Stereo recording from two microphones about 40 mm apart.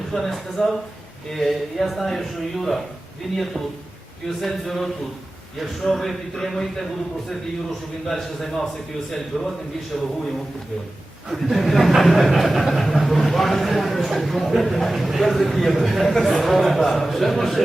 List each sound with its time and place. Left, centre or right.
0.1 s a man's voice: centre
8.0 s a man's voice: centre
11.5 s speech: centre